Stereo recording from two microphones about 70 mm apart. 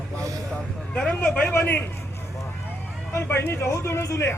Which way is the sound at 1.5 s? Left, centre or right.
Left.